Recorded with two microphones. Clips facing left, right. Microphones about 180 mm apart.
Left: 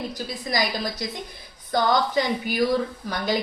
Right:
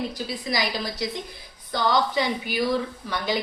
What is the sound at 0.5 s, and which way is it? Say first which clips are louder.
A woman's voice: left 3 dB; 45° left (ahead or behind).